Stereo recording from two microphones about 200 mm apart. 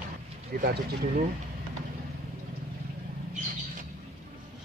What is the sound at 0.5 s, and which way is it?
Speech, 50° right (ahead or behind).